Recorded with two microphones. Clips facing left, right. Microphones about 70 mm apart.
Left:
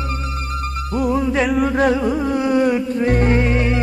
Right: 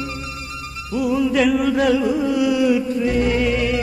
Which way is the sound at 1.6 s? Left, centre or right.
Left.